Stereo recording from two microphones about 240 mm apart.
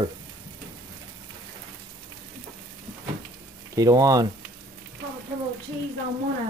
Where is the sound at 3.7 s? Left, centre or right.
Centre.